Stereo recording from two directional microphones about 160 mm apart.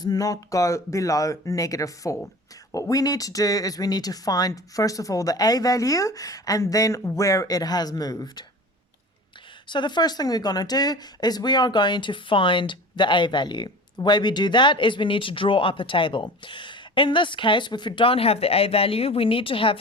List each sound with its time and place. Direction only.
0.0 s speech: 25° left (ahead or behind)
9.6 s speech: 30° left (ahead or behind)